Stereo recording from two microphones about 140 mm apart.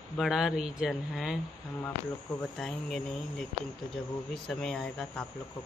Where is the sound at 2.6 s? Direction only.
5° left (ahead or behind).